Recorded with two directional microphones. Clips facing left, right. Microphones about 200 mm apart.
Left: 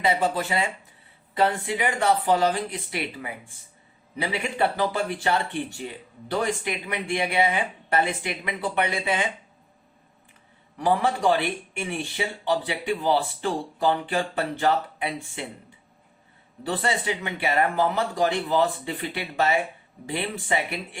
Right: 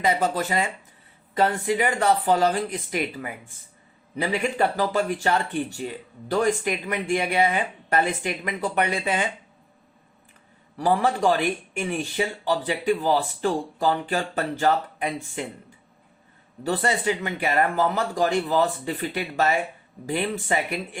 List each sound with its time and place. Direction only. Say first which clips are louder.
0.0 s speech: right 1 dB; 45° right (ahead or behind)
10.8 s speech: right 1 dB; 35° right (ahead or behind)
16.6 s speech: right 3 dB; 40° right (ahead or behind)